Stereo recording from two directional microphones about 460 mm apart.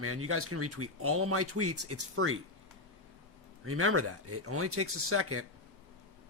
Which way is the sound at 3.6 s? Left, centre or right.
Right.